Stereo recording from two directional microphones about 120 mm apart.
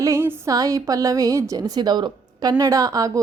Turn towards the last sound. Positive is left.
turn(degrees=-30)  # may be behind; listen again after turning